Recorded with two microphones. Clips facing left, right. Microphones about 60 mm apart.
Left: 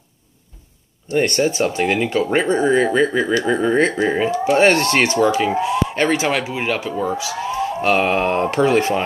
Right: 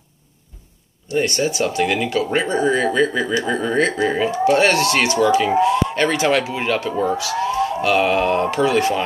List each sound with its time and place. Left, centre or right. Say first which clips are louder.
1.0 s speech: left 2 dB; left
5.6 s speech: right 2 dB; centre
6.9 s speech: right 2 dB; centre
7.3 s police car: right 3 dB; centre
7.8 s speech: left 1 dB; left